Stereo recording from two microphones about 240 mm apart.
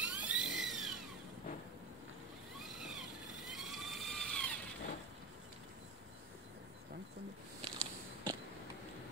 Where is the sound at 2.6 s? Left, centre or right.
Centre.